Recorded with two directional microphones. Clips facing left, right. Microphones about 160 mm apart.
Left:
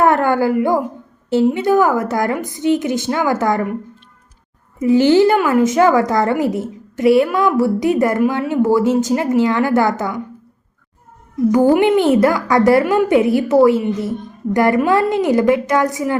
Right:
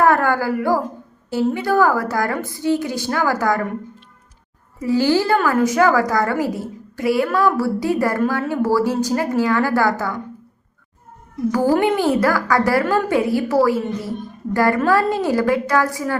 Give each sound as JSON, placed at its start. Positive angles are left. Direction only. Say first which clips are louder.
{"t": 0.0, "sound": "a sound", "louder": "left 2 dB", "side_deg": 20}
{"t": 1.3, "sound": "a woman's voice", "louder": "left 5 dB", "side_deg": 20}
{"t": 4.8, "sound": "a woman's voice", "louder": "left 6 dB", "side_deg": 20}
{"t": 11.5, "sound": "a woman's voice", "louder": "left 5 dB", "side_deg": 20}